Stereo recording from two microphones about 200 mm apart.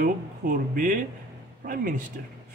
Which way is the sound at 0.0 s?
40° right (ahead or behind).